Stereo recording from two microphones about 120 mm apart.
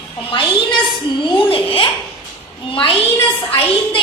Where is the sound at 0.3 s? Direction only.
45° left (ahead or behind).